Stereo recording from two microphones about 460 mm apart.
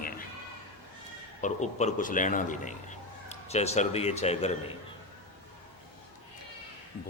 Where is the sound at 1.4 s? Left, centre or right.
Centre.